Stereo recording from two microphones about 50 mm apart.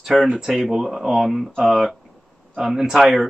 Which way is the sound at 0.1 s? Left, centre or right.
Centre.